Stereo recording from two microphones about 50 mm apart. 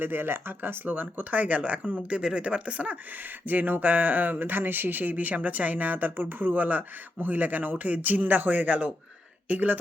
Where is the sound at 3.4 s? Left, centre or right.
Right.